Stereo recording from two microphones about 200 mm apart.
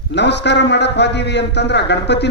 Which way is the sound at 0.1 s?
60° left (ahead or behind).